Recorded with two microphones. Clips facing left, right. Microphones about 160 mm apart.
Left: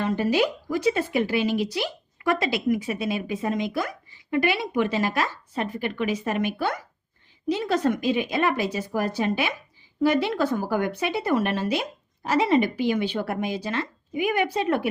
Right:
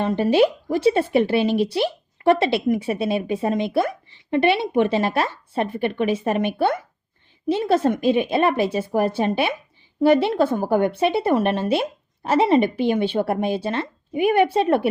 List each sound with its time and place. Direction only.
0.0 s a woman's voice: 25° right (ahead or behind)